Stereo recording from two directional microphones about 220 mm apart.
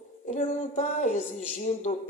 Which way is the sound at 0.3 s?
35° left (ahead or behind).